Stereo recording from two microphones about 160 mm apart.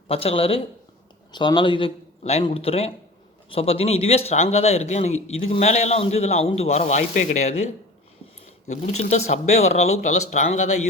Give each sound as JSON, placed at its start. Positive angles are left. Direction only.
{"t": 0.1, "sound": "a man's voice", "side_deg": 35}
{"t": 8.6, "sound": "speech", "side_deg": 45}